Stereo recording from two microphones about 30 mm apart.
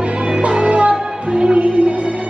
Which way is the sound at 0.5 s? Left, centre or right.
Right.